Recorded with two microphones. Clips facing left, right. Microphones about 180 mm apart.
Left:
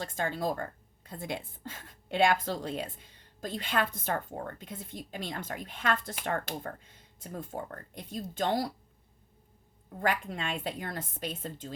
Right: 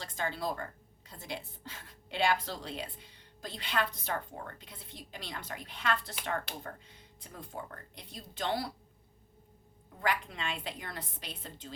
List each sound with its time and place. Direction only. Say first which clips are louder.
0.0 s speech: left 4 dB; 50° left (ahead or behind)
10.0 s speech: left 3 dB; 45° left (ahead or behind)